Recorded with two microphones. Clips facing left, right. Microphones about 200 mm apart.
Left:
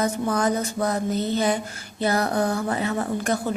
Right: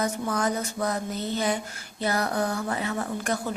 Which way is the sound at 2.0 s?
30° left (ahead or behind).